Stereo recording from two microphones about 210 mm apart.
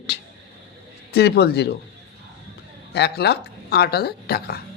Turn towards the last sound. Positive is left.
turn(degrees=50)  # may be behind; listen again after turning